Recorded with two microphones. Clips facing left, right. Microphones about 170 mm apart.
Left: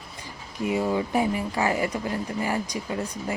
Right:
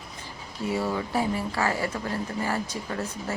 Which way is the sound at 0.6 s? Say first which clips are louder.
Left 3 dB; 15° left (ahead or behind).